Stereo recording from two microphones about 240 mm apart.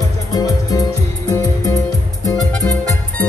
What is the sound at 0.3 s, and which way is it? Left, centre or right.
Music, centre.